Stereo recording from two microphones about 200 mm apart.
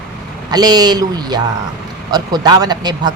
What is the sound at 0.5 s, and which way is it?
Speech, 20° right (ahead or behind).